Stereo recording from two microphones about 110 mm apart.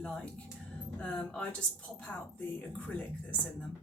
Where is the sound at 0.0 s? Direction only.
10° left (ahead or behind).